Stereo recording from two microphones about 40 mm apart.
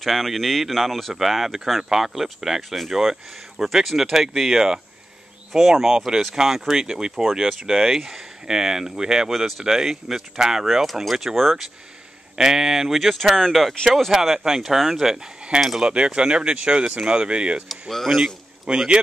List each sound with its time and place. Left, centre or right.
0.0 s speech: centre
9.3 s speech: centre
12.4 s speech: centre
13.5 s speech: centre
14.1 s speech: centre
15.8 s speech: right
17.6 s speech: centre
18.7 s speech: right